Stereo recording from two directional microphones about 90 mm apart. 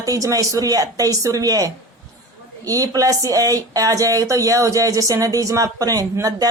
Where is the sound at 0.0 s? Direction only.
40° right (ahead or behind).